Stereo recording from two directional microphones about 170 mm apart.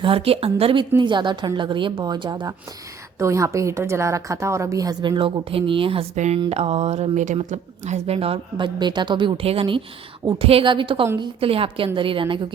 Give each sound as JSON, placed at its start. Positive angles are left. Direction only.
{"t": 0.0, "sound": "a woman's voice", "side_deg": -35}
{"t": 11.0, "sound": "a woman's voice", "side_deg": -20}
{"t": 11.3, "sound": "a woman's voice", "side_deg": -35}